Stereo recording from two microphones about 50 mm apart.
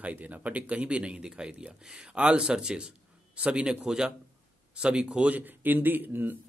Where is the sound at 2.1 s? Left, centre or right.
Right.